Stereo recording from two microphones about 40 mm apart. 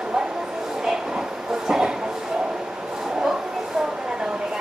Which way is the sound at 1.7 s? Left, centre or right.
Centre.